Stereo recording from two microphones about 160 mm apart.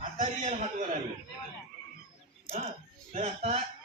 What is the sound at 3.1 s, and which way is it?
Speech, 45° right (ahead or behind).